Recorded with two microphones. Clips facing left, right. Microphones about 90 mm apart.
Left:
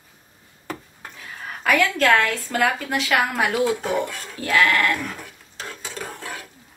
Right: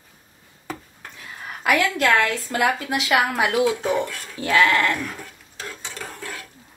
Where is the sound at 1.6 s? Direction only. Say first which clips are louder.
Left 1 dB; 15° right (ahead or behind).